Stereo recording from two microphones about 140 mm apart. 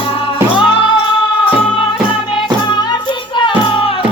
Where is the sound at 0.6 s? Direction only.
35° left (ahead or behind).